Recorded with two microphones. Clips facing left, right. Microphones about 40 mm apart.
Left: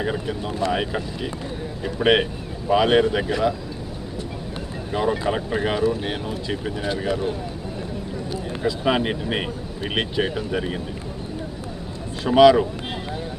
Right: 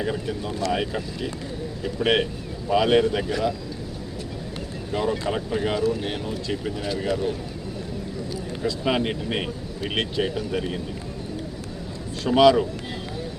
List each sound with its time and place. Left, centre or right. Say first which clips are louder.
0.0 s speech: left 2 dB; centre
4.9 s speech: left 3 dB; centre
8.6 s speech: left 2 dB; centre
12.2 s speech: left 3 dB; centre